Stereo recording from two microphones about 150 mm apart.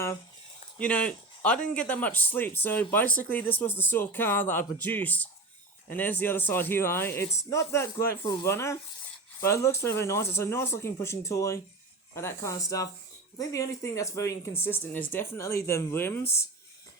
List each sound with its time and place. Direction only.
0.8 s speech: 10° left (ahead or behind)
16.2 s speech: 45° left (ahead or behind)